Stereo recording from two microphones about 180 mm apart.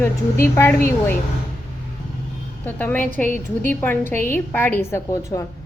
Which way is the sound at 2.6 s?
10° left (ahead or behind).